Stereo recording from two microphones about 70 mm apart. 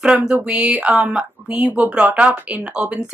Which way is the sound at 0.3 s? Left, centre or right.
Centre.